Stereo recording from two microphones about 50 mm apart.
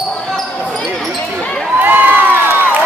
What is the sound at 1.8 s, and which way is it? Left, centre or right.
Crowd, right.